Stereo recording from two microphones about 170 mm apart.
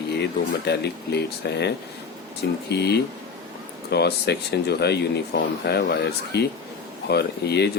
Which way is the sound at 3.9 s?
75° left (ahead or behind).